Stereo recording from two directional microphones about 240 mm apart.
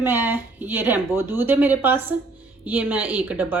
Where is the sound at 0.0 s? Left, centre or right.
Centre.